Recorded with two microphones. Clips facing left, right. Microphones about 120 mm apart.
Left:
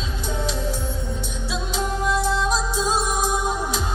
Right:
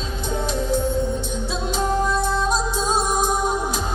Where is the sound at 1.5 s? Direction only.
40° right (ahead or behind).